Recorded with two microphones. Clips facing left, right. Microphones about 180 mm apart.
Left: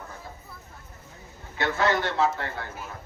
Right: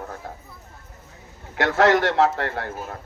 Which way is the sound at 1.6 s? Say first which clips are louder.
Right 7 dB; 85° right.